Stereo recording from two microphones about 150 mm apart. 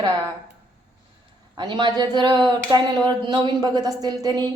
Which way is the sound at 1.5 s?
30° right (ahead or behind).